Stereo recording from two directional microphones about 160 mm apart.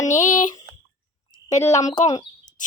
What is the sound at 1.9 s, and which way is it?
Speech, 45° left (ahead or behind).